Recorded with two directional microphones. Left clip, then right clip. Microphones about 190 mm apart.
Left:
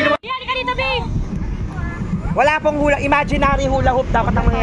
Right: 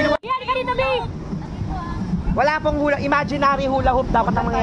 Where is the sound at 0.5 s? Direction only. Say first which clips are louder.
Left 2 dB; 35° right (ahead or behind).